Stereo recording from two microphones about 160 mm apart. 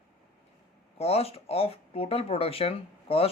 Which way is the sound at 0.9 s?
40° left (ahead or behind).